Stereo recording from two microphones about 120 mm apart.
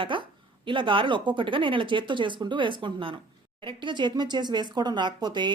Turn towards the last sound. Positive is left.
turn(degrees=-35)  # may be behind; listen again after turning